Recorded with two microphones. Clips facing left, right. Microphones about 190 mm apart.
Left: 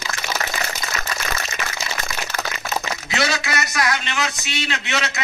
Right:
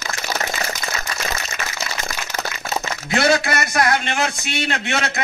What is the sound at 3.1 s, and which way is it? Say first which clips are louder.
A man's voice: right 6 dB; 50° right (ahead or behind).